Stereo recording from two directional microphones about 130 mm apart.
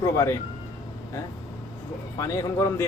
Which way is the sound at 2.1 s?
30° left (ahead or behind).